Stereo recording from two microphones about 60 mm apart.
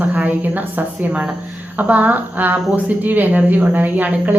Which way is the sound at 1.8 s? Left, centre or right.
Right.